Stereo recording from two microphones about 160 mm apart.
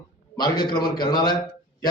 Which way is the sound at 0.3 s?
25° left (ahead or behind).